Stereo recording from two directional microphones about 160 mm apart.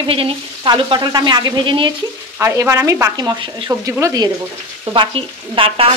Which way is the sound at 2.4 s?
15° right (ahead or behind).